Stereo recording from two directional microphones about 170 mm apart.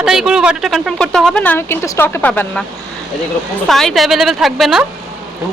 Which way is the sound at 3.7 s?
Centre (ahead or behind).